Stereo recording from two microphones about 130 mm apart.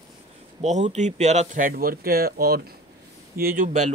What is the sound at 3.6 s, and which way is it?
Speech, 65° right (ahead or behind).